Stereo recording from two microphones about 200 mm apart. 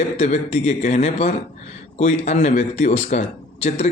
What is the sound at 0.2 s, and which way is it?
A man's voice, 35° left (ahead or behind).